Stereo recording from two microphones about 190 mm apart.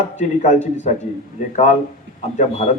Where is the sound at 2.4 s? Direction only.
40° left (ahead or behind).